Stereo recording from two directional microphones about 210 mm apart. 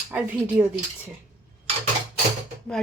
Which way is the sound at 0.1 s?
5° right (ahead or behind).